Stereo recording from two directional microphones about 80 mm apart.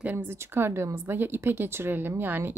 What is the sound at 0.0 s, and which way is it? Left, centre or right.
A woman's voice, right.